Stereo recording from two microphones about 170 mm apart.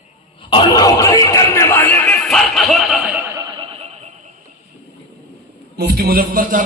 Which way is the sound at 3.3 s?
20° right (ahead or behind).